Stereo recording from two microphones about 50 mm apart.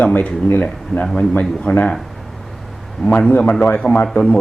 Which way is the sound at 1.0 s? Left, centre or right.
Centre.